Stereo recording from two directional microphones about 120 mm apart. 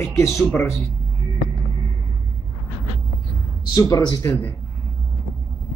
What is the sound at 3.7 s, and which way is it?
Speech, 30° left (ahead or behind).